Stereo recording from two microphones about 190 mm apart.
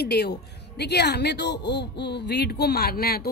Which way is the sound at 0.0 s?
60° left (ahead or behind).